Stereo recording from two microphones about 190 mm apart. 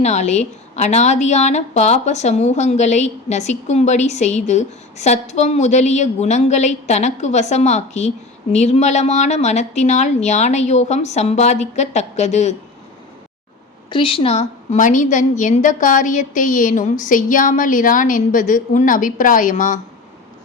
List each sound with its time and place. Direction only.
0.0 s a woman's voice: 35° left (ahead or behind)
13.9 s a woman's voice: 30° left (ahead or behind)